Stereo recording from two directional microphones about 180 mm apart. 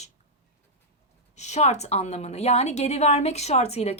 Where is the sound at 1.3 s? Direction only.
40° left (ahead or behind).